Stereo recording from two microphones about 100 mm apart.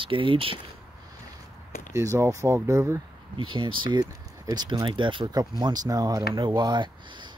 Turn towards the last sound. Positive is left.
turn(degrees=-50)  # may be behind; listen again after turning